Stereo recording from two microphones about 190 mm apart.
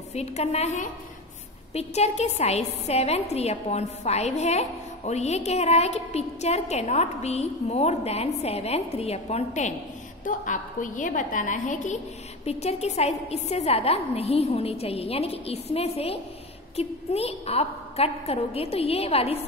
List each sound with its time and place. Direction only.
0.1 s a woman's voice: 35° left (ahead or behind)